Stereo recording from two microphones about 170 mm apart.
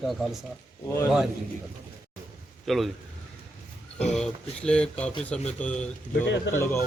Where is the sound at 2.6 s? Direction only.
Centre (ahead or behind).